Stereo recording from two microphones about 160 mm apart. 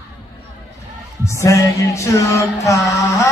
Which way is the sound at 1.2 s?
20° left (ahead or behind).